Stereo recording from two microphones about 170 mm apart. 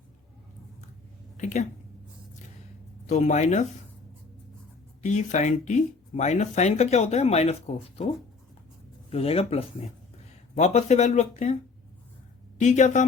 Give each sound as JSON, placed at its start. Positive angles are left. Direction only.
{"t": 1.4, "sound": "a woman's voice", "side_deg": 45}
{"t": 3.1, "sound": "speech", "side_deg": 45}
{"t": 5.0, "sound": "speech", "side_deg": 45}
{"t": 9.0, "sound": "speech", "side_deg": 35}
{"t": 12.5, "sound": "speech", "side_deg": 45}